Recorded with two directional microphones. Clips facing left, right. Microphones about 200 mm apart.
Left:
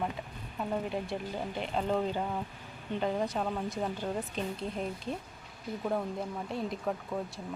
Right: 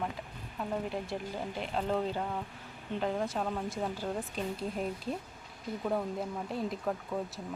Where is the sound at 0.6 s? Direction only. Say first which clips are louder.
Left 2 dB; centre (ahead or behind).